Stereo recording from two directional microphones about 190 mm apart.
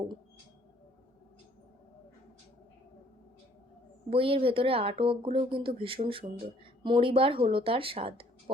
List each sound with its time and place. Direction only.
4.1 s speech: 30° right (ahead or behind)